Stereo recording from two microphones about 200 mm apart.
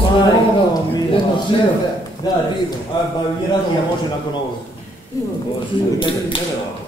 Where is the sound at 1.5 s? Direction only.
25° left (ahead or behind).